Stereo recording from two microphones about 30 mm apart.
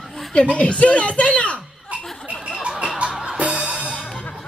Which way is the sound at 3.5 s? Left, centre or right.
Right.